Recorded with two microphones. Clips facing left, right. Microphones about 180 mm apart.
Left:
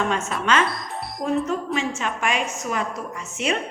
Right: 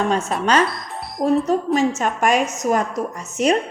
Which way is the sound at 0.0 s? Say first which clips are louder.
Right 4 dB; 35° right (ahead or behind).